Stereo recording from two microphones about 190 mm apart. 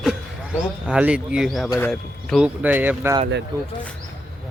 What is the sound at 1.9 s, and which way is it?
Speech, centre (ahead or behind).